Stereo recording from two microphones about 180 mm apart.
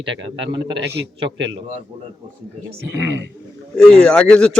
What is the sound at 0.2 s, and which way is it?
Speech, 90° right.